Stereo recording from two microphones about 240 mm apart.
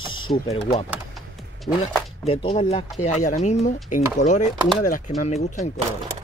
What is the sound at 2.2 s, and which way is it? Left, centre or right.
Speech, left.